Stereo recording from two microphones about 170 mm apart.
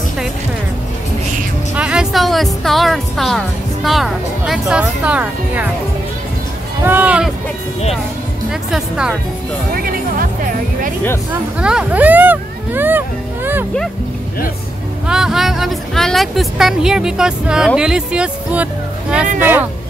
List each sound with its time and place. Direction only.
1.8 s speech: 5° right (ahead or behind)
6.8 s speech: 10° right (ahead or behind)
8.5 s speech: 5° right (ahead or behind)
9.8 s speech: 60° right (ahead or behind)
11.6 s speech: 5° right (ahead or behind)
15.0 s speech: 5° right (ahead or behind)